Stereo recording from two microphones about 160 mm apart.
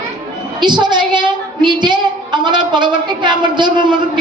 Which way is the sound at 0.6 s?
30° right (ahead or behind).